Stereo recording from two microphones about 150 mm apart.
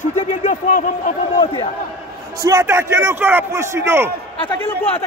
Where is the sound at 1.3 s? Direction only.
30° left (ahead or behind).